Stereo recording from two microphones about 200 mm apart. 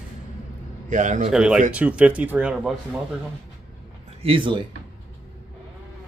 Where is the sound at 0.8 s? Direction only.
40° right (ahead or behind).